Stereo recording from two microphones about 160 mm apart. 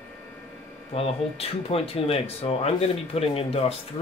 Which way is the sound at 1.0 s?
40° left (ahead or behind).